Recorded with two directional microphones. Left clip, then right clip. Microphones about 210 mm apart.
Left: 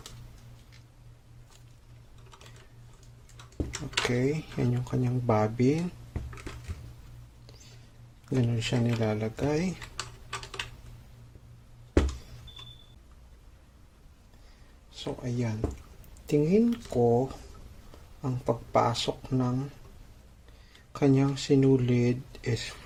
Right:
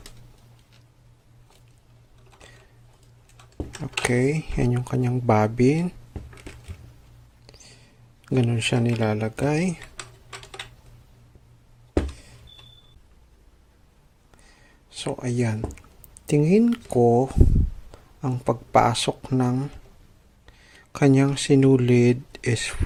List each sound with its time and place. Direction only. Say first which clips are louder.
4.0 s speech: right 8 dB; 30° right (ahead or behind)
8.2 s speech: right 7 dB; 30° right (ahead or behind)
14.8 s a sound: right 7 dB; 35° right (ahead or behind)
16.2 s speech: right 5 dB; 30° right (ahead or behind)
20.9 s speech: right 6 dB; 30° right (ahead or behind)